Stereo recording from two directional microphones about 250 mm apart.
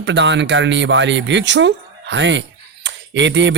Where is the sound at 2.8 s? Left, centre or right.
Right.